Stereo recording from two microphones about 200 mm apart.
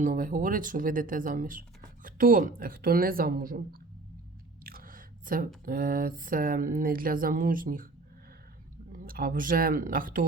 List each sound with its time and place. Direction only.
0.0 s speech: 40° right (ahead or behind)
4.6 s a sound: 45° right (ahead or behind)
5.6 s speech: 45° right (ahead or behind)
8.9 s speech: 45° right (ahead or behind)